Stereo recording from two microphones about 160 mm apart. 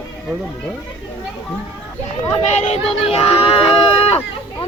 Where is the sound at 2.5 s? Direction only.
45° left (ahead or behind).